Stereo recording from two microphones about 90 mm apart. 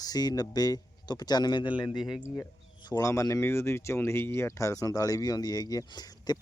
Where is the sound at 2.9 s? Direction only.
35° left (ahead or behind).